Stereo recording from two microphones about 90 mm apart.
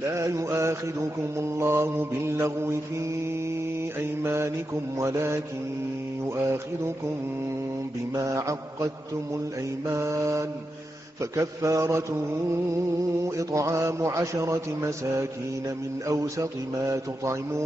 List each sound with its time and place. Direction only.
0.1 s a man's voice: 35° right (ahead or behind)
1.6 s mantra: 25° right (ahead or behind)
4.0 s mantra: 30° right (ahead or behind)
4.9 s a man's voice: 35° right (ahead or behind)
8.1 s a man's voice: 35° right (ahead or behind)
13.4 s a man's voice: 35° right (ahead or behind)